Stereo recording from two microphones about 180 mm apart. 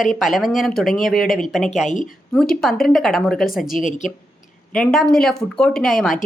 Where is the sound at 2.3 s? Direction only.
5° left (ahead or behind).